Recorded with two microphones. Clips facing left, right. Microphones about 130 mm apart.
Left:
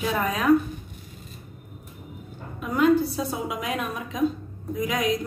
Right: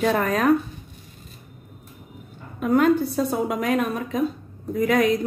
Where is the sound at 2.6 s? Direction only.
50° right (ahead or behind).